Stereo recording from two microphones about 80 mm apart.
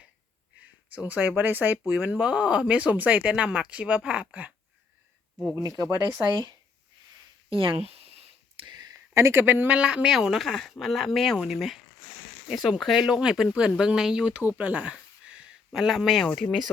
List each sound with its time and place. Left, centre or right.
0.9 s speech: centre
5.4 s speech: centre
5.8 s speech: right
8.6 s a sound: right
9.1 s speech: right
9.7 s speech: centre